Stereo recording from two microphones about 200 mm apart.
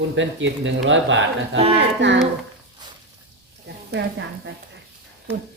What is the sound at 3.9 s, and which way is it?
Speech, 60° right (ahead or behind).